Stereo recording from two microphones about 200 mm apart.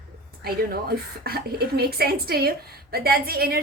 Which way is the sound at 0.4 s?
50° right (ahead or behind).